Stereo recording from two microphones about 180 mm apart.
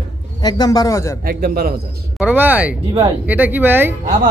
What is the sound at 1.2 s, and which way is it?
Speech, 55° right (ahead or behind).